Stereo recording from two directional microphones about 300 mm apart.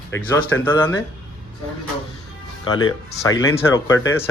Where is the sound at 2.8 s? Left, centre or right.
Left.